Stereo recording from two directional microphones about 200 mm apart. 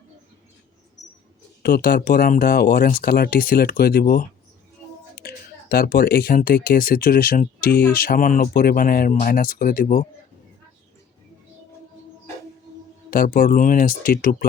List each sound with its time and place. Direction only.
1.6 s speech: 50° left (ahead or behind)
7.7 s speech: 10° left (ahead or behind)
7.9 s speech: 45° left (ahead or behind)
13.1 s speech: 45° left (ahead or behind)